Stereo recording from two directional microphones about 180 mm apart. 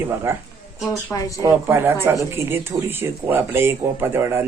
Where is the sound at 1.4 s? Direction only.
15° right (ahead or behind).